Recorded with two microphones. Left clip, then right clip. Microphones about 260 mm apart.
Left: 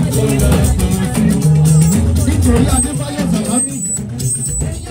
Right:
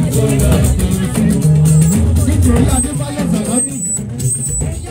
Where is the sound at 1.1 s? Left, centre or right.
Left.